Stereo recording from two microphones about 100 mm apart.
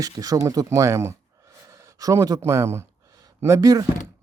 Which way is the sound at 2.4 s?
30° right (ahead or behind).